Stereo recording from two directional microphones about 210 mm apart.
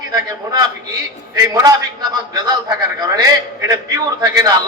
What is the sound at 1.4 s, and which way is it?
A man's voice, 15° right (ahead or behind).